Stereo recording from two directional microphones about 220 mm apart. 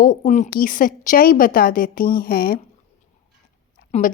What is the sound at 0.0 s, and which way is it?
Speech, 35° left (ahead or behind).